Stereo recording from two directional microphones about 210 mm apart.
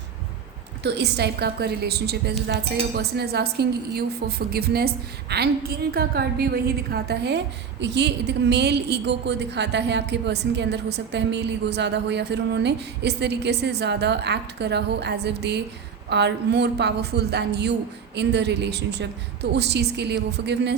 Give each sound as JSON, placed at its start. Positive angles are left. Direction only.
{"t": 0.8, "sound": "a woman's voice", "side_deg": -55}